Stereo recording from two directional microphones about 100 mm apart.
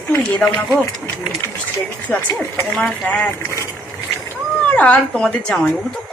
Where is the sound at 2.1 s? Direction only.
15° left (ahead or behind).